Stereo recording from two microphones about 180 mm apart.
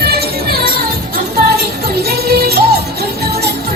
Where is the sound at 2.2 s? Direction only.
60° right (ahead or behind).